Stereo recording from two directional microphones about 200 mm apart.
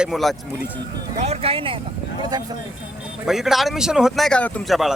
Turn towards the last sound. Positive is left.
turn(degrees=0)  # may be behind; listen again after turning